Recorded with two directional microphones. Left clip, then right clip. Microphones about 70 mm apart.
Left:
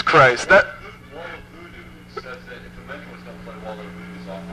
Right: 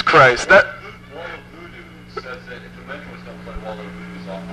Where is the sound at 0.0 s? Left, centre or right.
Right.